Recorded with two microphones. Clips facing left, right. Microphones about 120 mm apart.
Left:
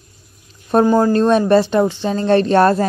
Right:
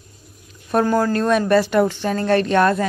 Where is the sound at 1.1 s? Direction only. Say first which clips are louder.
Left 4 dB; 30° left (ahead or behind).